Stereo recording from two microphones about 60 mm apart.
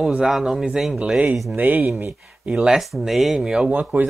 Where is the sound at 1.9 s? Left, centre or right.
Right.